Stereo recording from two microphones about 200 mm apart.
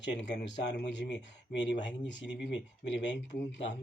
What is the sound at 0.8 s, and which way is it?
Speech, 60° left (ahead or behind).